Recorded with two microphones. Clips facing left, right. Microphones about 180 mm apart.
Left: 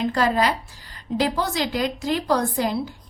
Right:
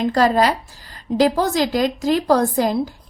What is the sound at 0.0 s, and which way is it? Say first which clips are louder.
A woman's voice: right 5 dB; 40° right (ahead or behind).